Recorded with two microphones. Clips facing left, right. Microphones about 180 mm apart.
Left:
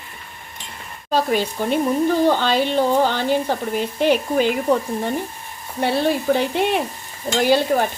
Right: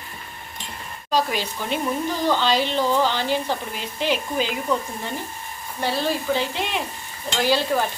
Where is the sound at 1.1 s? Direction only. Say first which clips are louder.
Left 4 dB; 50° left (ahead or behind).